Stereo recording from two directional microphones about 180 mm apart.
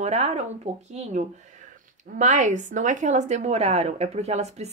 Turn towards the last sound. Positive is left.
turn(degrees=-35)  # may be behind; listen again after turning